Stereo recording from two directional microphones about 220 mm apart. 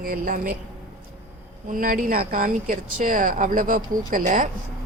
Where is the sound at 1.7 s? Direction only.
40° right (ahead or behind).